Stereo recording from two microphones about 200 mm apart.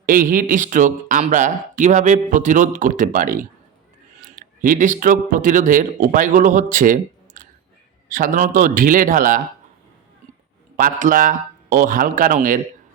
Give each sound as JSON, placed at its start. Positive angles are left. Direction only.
{"t": 0.0, "sound": "speech", "side_deg": -45}
{"t": 11.0, "sound": "speech", "side_deg": -40}